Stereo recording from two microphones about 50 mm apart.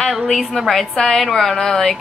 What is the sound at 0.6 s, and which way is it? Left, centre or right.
A woman's voice, centre.